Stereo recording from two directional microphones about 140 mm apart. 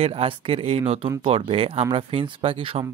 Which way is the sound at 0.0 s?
40° right (ahead or behind).